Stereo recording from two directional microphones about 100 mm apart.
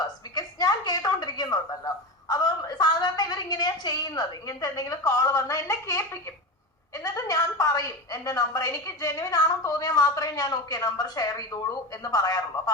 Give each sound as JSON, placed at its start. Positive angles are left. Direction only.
{"t": 0.0, "sound": "a woman's voice", "side_deg": 45}